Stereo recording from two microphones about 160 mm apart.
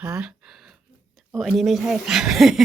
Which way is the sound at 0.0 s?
5° right (ahead or behind).